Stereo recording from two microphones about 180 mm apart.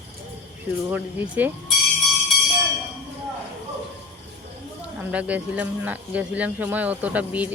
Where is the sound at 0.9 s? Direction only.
10° right (ahead or behind).